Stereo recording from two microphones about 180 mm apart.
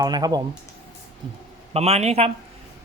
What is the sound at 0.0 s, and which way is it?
Speech, 20° right (ahead or behind).